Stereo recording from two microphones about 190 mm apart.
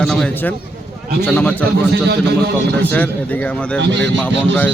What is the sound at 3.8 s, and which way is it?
Speech, 65° right (ahead or behind).